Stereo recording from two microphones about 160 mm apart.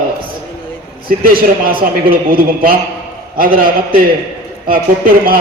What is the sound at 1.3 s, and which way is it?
Speech, 65° right (ahead or behind).